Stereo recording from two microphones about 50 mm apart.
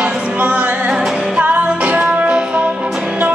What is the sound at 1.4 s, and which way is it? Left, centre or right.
Music, right.